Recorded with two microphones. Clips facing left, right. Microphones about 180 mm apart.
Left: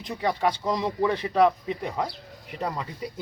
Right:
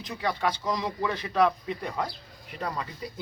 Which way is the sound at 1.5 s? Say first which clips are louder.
Left 4 dB; 15° left (ahead or behind).